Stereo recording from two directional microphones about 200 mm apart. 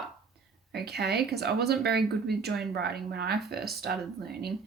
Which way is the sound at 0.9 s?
55° right (ahead or behind).